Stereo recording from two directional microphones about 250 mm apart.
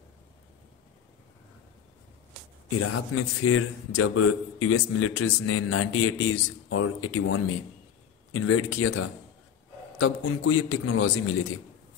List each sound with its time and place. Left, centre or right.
2.8 s a man's voice: left